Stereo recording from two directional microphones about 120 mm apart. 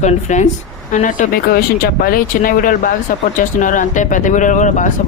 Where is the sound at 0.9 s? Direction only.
90° left.